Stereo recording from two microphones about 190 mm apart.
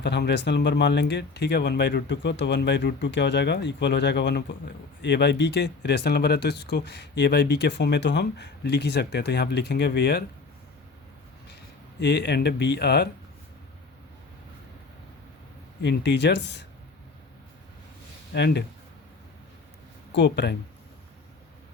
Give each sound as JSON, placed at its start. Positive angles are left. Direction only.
{"t": 0.0, "sound": "speech", "side_deg": 65}
{"t": 11.9, "sound": "speech", "side_deg": 65}
{"t": 15.8, "sound": "speech", "side_deg": 65}
{"t": 18.3, "sound": "speech", "side_deg": 60}
{"t": 20.1, "sound": "speech", "side_deg": 60}